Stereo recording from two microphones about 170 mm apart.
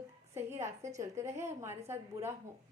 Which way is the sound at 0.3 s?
15° right (ahead or behind).